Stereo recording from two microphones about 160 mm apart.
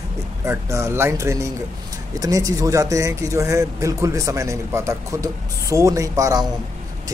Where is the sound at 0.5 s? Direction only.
15° right (ahead or behind).